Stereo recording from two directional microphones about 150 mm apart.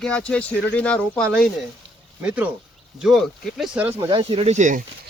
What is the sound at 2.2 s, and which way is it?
Speech, 10° right (ahead or behind).